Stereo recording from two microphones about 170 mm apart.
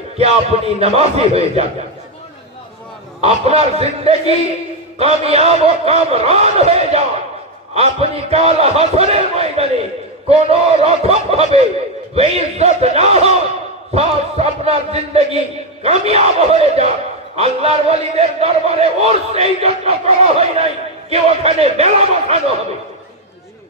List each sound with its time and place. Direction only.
0.7 s a man's voice: 35° right (ahead or behind)
3.2 s a man's voice: 40° right (ahead or behind)